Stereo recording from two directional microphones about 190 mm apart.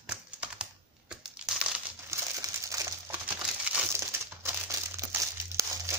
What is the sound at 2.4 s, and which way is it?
Crumpling, 15° right (ahead or behind).